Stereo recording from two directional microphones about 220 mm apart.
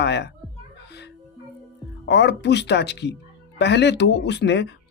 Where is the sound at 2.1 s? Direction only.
50° left (ahead or behind).